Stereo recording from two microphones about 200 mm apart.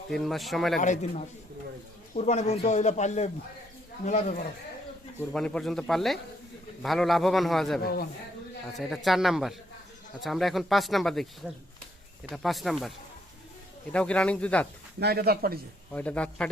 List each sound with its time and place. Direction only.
0.1 s speech: centre (ahead or behind)
0.8 s speech: 35° left (ahead or behind)
5.3 s speech: 5° left (ahead or behind)
7.8 s a man's voice: 50° left (ahead or behind)
9.0 s speech: centre (ahead or behind)
12.3 s speech: centre (ahead or behind)
13.9 s speech: 5° left (ahead or behind)
14.9 s speech: 50° right (ahead or behind)
15.9 s speech: 5° left (ahead or behind)